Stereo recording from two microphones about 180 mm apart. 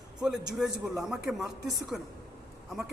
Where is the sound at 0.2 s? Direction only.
5° right (ahead or behind).